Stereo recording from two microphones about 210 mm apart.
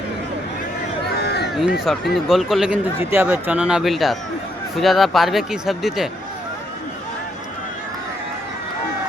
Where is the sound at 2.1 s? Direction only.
Centre (ahead or behind).